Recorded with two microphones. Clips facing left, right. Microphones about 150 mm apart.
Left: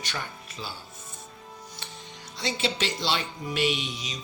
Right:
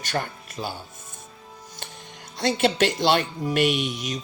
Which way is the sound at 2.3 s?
55° right (ahead or behind).